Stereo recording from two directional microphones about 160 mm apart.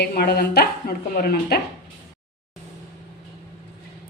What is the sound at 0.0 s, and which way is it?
Speech, 85° left.